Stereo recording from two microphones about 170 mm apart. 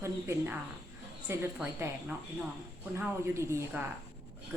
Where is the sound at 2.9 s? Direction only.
15° right (ahead or behind).